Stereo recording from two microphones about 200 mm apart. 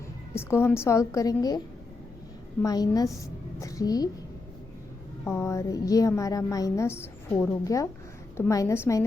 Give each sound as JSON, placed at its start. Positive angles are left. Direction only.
{"t": 0.3, "sound": "a woman's voice", "side_deg": 10}
{"t": 5.2, "sound": "a woman's voice", "side_deg": 15}